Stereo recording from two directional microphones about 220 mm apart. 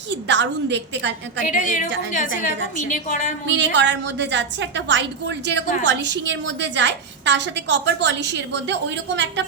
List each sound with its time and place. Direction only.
0.1 s a woman's voice: 55° right (ahead or behind)
1.5 s a woman's voice: 35° left (ahead or behind)
3.4 s a woman's voice: 55° right (ahead or behind)